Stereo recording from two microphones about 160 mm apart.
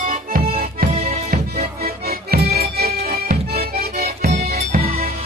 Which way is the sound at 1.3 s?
70° right (ahead or behind).